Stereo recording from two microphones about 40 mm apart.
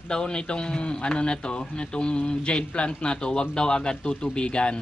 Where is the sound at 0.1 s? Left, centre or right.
Left.